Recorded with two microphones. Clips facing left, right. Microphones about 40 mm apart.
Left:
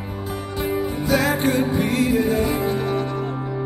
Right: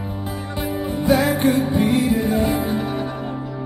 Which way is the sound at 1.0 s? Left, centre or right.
Right.